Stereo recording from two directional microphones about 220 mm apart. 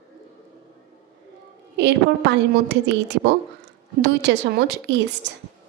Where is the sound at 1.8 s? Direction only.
50° right (ahead or behind).